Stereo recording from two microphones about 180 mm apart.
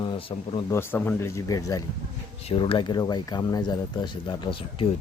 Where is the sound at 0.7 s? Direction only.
10° left (ahead or behind).